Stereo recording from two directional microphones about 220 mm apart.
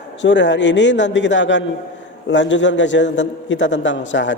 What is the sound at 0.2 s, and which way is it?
A man's voice, 55° left (ahead or behind).